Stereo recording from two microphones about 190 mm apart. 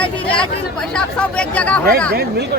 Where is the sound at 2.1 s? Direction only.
55° right (ahead or behind).